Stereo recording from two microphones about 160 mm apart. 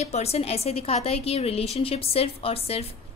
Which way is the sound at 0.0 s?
45° left (ahead or behind).